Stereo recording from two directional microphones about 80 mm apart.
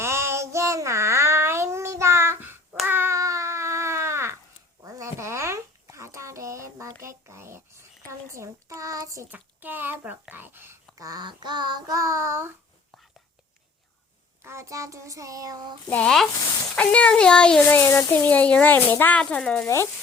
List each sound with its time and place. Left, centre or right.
0.0 s child singing: right
3.2 s baby cry: right
4.8 s a sound: right
8.3 s child singing: right
9.3 s a sound: right
11.0 s child singing: right
14.4 s a sound: right
16.6 s speech: centre
17.7 s speech: left
19.2 s speech: centre
19.6 s speech: left